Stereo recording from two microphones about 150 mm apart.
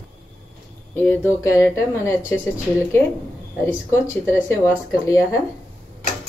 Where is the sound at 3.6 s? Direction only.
15° left (ahead or behind).